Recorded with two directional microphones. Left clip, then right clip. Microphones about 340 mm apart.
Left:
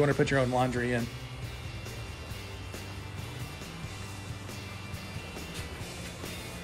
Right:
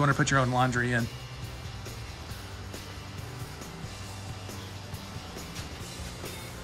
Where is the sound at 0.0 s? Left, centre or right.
Centre.